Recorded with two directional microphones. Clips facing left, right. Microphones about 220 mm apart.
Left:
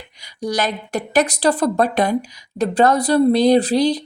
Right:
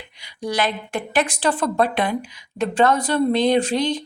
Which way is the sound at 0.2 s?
40° left (ahead or behind).